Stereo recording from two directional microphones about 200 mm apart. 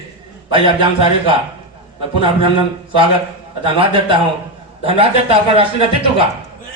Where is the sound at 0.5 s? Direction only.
25° right (ahead or behind).